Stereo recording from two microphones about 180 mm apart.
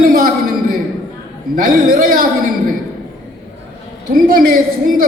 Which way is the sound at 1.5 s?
55° right (ahead or behind).